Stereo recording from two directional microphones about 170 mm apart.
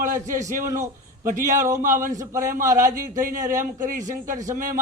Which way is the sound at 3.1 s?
50° right (ahead or behind).